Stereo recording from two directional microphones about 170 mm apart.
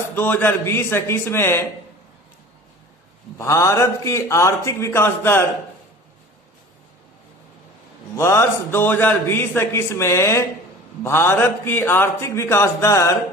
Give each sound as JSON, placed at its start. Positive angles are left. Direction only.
{"t": 0.1, "sound": "a man's voice", "side_deg": 10}
{"t": 3.3, "sound": "a man's voice", "side_deg": 15}
{"t": 8.2, "sound": "a man's voice", "side_deg": 15}